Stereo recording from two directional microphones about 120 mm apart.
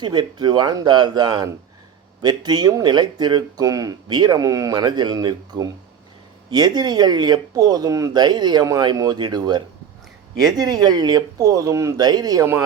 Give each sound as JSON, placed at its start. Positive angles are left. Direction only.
{"t": 0.0, "sound": "speech", "side_deg": -40}